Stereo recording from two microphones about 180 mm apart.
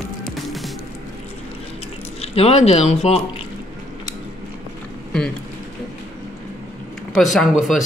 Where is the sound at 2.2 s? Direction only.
35° left (ahead or behind).